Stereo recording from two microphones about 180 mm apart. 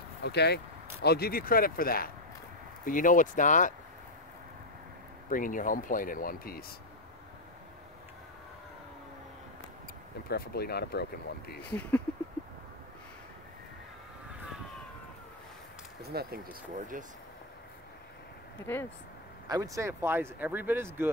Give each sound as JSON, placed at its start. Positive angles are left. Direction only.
{"t": 0.2, "sound": "speech", "side_deg": 65}
{"t": 5.3, "sound": "speech", "side_deg": 50}
{"t": 10.3, "sound": "speech", "side_deg": 60}
{"t": 16.0, "sound": "speech", "side_deg": -60}
{"t": 18.7, "sound": "speech", "side_deg": 10}
{"t": 19.4, "sound": "speech", "side_deg": -20}